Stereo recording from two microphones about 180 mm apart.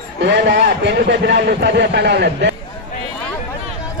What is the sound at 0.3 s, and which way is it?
A man's voice, 70° right (ahead or behind).